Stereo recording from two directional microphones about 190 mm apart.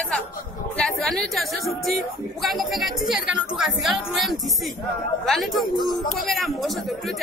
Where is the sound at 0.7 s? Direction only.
Centre (ahead or behind).